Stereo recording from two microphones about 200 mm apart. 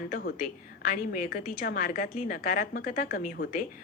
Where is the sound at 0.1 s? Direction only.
45° left (ahead or behind).